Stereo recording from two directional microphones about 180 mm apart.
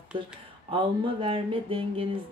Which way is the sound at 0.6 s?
25° right (ahead or behind).